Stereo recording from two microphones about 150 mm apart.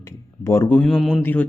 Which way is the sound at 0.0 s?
15° left (ahead or behind).